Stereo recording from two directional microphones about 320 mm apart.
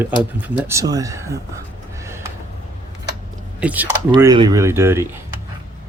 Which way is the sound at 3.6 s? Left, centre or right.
Centre.